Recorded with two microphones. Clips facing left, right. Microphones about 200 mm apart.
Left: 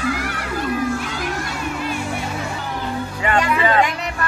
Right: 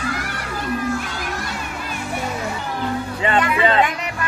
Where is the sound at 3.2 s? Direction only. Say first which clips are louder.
Even; 25° right (ahead or behind).